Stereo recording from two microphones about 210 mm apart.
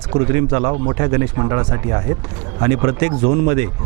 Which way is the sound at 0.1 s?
30° right (ahead or behind).